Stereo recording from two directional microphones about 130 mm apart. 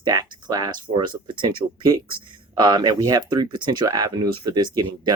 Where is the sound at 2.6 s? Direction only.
30° right (ahead or behind).